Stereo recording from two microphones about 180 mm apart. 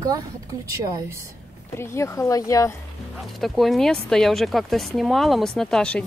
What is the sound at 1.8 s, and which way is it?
Speech, 15° left (ahead or behind).